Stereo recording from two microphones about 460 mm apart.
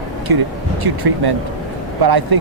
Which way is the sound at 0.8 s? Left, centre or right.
Right.